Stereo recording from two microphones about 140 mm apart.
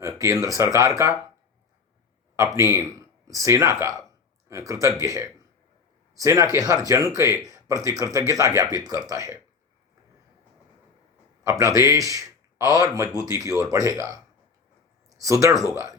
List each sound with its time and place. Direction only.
0.0 s speech: 20° right (ahead or behind)
2.3 s speech: 20° right (ahead or behind)
11.4 s speech: 25° right (ahead or behind)
15.2 s speech: 25° right (ahead or behind)